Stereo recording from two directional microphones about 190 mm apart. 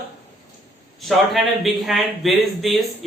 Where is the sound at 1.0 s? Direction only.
Centre (ahead or behind).